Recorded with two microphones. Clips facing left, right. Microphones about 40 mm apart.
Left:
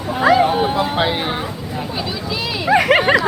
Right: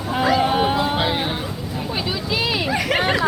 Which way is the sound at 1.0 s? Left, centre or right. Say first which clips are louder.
Left 3 dB; centre.